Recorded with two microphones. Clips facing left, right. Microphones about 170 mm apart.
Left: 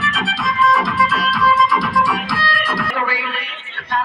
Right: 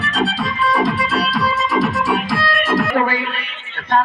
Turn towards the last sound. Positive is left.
turn(degrees=-45)  # may be behind; listen again after turning